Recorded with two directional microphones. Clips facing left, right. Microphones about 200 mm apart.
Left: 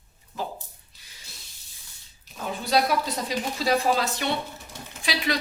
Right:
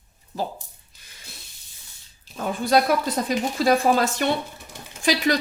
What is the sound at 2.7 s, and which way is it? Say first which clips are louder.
A woman's voice: right 4 dB; 50° right (ahead or behind).